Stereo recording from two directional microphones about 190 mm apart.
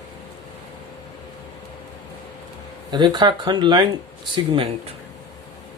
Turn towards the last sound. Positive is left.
turn(degrees=-30)  # may be behind; listen again after turning